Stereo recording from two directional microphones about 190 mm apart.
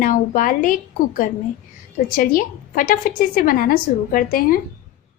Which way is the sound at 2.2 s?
45° left (ahead or behind).